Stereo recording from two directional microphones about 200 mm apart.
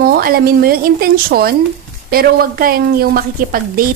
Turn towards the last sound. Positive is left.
turn(degrees=-45)  # may be behind; listen again after turning